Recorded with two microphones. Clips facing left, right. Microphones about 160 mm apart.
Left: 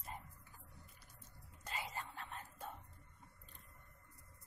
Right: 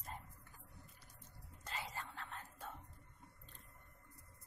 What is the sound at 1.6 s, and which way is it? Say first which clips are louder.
Whispering: left 1 dB; 15° left (ahead or behind).